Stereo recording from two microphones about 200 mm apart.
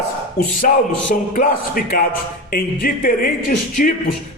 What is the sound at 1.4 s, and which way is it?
A man's voice, 45° left (ahead or behind).